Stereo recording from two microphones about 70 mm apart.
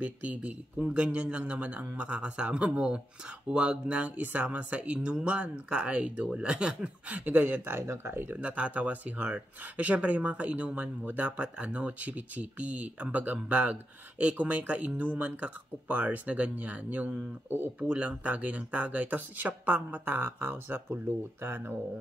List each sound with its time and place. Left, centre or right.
0.0 s speech: right
8.4 s speech: centre